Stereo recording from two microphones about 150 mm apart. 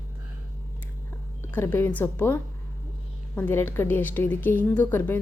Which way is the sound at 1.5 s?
15° left (ahead or behind).